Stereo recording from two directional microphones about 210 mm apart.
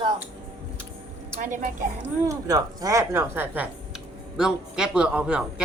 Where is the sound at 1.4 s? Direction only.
35° right (ahead or behind).